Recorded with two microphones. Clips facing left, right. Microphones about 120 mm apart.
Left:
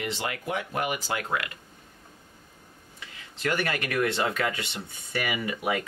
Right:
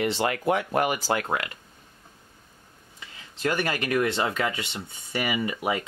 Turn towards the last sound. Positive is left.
turn(degrees=-20)  # may be behind; listen again after turning